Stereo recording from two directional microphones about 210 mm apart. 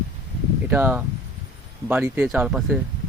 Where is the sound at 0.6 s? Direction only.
10° right (ahead or behind).